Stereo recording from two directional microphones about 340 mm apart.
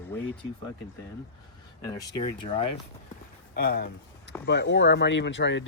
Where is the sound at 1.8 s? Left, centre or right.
Centre.